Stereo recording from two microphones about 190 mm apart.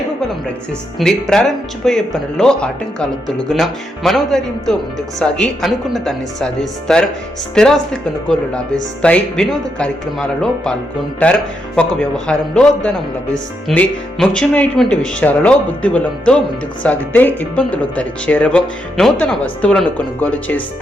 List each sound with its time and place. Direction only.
0.9 s speech: 5° left (ahead or behind)
9.0 s speech: 5° left (ahead or behind)